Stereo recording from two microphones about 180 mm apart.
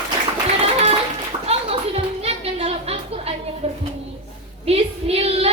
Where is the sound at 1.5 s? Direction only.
35° right (ahead or behind).